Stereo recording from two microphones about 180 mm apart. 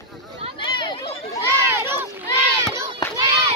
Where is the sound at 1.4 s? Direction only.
15° right (ahead or behind).